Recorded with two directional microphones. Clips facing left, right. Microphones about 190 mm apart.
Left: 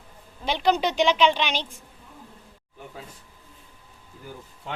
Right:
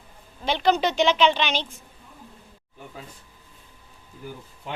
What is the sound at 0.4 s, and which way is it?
Speech, 10° left (ahead or behind).